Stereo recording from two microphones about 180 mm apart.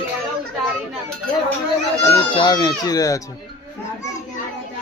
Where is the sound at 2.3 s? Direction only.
20° left (ahead or behind).